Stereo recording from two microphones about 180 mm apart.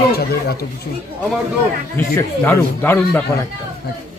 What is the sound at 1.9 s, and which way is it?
Speech, 15° left (ahead or behind).